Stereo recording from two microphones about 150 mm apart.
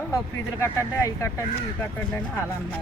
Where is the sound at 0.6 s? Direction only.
20° left (ahead or behind).